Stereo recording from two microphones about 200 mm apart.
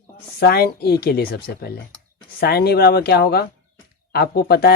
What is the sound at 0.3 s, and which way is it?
Speech, 50° left (ahead or behind).